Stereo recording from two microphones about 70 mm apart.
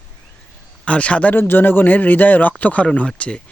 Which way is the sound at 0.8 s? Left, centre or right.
Centre.